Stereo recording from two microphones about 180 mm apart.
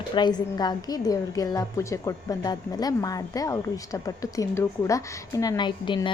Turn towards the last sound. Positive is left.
turn(degrees=25)  # may be behind; listen again after turning